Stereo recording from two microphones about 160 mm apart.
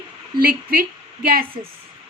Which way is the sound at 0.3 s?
70° right (ahead or behind).